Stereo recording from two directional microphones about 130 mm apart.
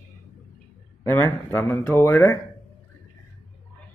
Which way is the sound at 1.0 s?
20° left (ahead or behind).